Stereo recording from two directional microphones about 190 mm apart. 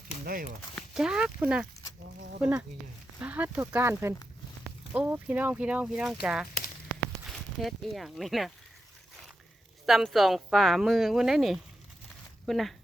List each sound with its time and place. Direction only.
0.3 s speech: 50° right (ahead or behind)
0.8 s speech: 5° right (ahead or behind)
3.2 s speech: 10° right (ahead or behind)
9.8 s speech: centre (ahead or behind)